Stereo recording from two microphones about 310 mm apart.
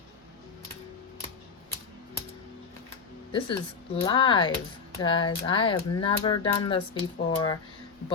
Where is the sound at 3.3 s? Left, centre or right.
Centre.